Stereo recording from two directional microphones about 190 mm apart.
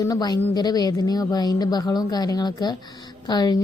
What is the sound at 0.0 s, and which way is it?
A woman's voice, 20° left (ahead or behind).